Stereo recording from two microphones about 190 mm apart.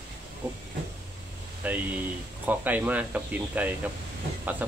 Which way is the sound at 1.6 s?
10° right (ahead or behind).